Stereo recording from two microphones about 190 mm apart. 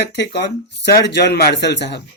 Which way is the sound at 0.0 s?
65° left (ahead or behind).